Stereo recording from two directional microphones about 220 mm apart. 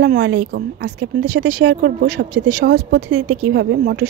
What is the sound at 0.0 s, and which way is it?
Speech, 55° right (ahead or behind).